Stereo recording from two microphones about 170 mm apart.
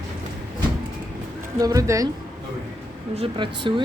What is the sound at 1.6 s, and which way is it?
Speech, 20° right (ahead or behind).